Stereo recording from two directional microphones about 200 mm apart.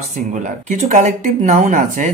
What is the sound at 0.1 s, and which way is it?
Speech, 40° right (ahead or behind).